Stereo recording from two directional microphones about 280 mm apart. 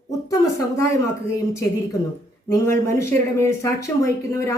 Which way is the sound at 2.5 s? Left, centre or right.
Centre.